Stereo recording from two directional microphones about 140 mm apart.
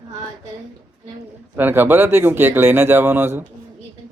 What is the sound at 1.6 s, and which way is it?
Speech, 15° right (ahead or behind).